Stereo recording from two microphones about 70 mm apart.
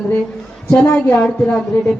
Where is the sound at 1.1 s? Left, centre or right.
Centre.